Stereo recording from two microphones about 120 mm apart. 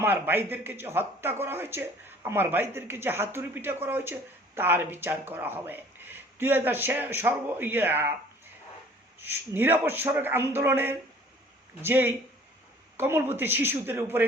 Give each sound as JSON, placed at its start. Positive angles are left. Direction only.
{"t": 0.0, "sound": "a man's voice", "side_deg": -15}
{"t": 9.2, "sound": "a man's voice", "side_deg": -20}